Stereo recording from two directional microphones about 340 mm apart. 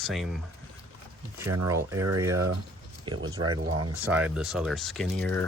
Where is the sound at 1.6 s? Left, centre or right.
Centre.